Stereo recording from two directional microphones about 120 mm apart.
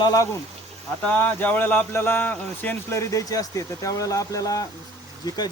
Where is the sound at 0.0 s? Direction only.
30° left (ahead or behind).